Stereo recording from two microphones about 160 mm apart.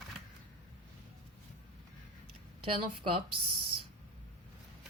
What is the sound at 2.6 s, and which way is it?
Speech, 35° right (ahead or behind).